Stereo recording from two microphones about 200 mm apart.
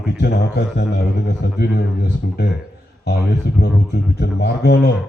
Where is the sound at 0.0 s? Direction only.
55° left (ahead or behind).